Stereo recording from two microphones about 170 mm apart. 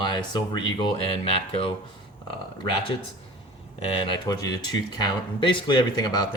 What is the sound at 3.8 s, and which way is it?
Speech, 35° left (ahead or behind).